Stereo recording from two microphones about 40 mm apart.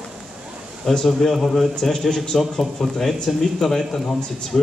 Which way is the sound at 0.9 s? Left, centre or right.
Centre.